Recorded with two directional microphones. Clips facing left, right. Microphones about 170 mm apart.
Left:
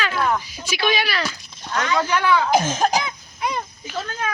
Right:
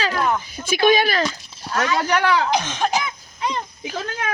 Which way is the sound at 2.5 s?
45° left (ahead or behind).